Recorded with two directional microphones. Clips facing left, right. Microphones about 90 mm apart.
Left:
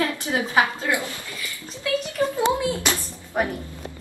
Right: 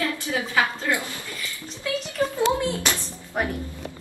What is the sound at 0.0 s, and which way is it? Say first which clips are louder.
A woman's voice: left 2 dB; 25° left (ahead or behind).